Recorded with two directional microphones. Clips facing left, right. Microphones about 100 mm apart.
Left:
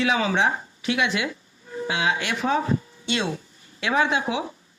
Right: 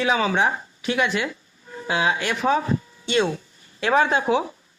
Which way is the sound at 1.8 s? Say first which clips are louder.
Right 2 dB; 40° right (ahead or behind).